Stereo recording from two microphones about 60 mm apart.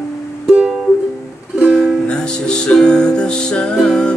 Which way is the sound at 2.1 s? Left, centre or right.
Centre.